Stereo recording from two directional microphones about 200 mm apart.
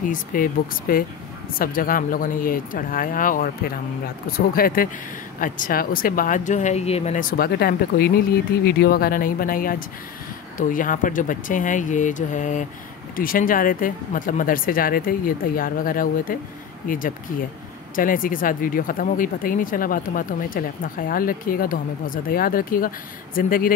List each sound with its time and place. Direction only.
0.1 s speech: 45° left (ahead or behind)